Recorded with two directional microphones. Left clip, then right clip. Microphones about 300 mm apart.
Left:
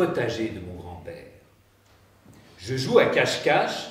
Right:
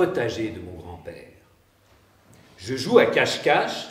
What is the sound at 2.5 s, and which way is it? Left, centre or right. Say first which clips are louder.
A man's voice: right 2 dB; centre.